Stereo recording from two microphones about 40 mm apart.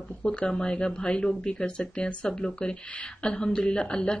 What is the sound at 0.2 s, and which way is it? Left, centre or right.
Speech, left.